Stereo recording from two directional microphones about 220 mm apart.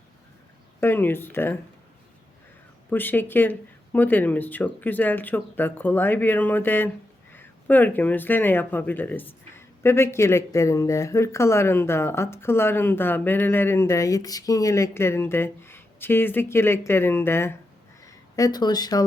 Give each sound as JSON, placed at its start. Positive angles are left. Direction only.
{"t": 0.8, "sound": "speech", "side_deg": 10}
{"t": 2.9, "sound": "speech", "side_deg": 10}